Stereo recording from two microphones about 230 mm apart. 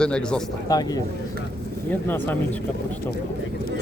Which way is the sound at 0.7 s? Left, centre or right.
Centre.